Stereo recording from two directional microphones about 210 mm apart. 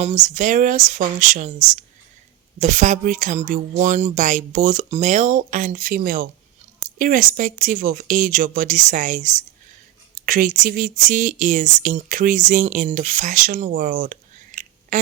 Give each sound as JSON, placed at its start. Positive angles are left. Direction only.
{"t": 0.0, "sound": "speech", "side_deg": -35}